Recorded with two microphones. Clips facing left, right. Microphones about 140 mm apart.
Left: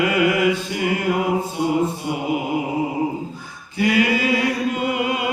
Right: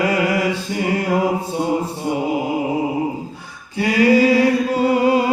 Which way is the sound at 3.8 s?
35° right (ahead or behind).